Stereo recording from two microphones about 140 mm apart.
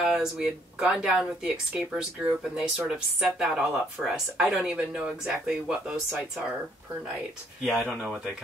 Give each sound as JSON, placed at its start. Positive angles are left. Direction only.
{"t": 0.0, "sound": "speech", "side_deg": -5}
{"t": 7.6, "sound": "speech", "side_deg": 0}